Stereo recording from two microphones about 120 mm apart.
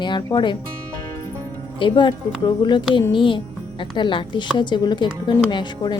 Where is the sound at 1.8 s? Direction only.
40° left (ahead or behind).